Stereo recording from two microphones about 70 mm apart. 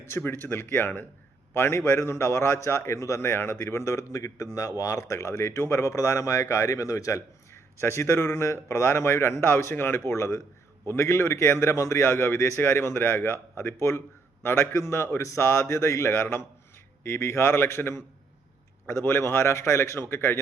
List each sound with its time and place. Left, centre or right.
0.1 s a man's voice: left
1.5 s a man's voice: left